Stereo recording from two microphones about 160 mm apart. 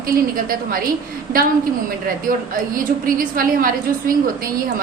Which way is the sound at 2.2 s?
60° right (ahead or behind).